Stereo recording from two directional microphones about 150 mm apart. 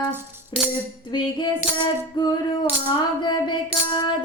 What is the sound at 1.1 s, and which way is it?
Music, 30° left (ahead or behind).